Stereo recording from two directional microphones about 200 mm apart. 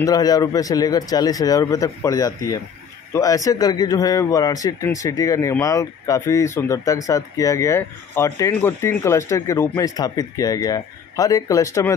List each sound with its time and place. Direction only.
0.0 s speech: 20° left (ahead or behind)